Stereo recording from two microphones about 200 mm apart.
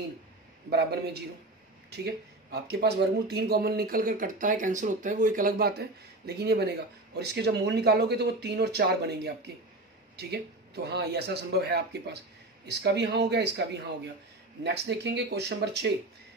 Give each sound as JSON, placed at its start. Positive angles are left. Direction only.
{"t": 0.7, "sound": "speech", "side_deg": -55}